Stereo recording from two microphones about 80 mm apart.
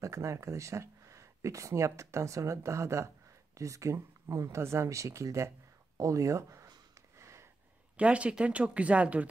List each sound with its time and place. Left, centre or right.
0.0 s speech: right
7.2 s a sound: right
8.0 s speech: centre